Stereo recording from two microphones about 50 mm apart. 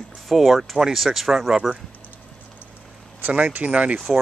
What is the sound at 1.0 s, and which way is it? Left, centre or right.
Speech, centre.